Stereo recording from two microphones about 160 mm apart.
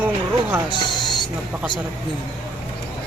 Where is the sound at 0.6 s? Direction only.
25° left (ahead or behind).